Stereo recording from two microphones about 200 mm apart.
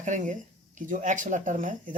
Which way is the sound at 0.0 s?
40° right (ahead or behind).